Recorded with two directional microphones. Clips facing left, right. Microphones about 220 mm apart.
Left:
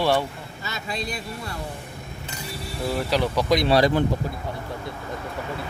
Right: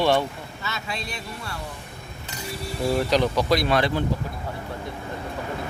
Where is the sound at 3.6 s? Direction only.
35° left (ahead or behind).